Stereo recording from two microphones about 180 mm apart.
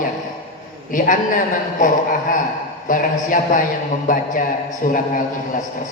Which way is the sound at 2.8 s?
50° left (ahead or behind).